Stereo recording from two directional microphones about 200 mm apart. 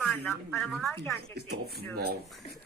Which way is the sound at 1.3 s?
50° right (ahead or behind).